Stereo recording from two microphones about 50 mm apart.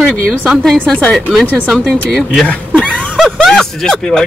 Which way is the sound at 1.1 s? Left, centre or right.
Centre.